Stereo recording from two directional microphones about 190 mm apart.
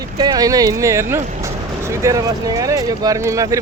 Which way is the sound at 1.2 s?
35° right (ahead or behind).